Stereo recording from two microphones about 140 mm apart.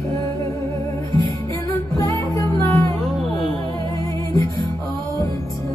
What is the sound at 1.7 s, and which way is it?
Music, 25° left (ahead or behind).